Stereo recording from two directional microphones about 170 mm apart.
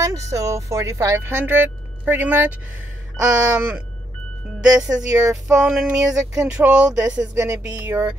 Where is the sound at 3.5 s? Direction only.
5° right (ahead or behind).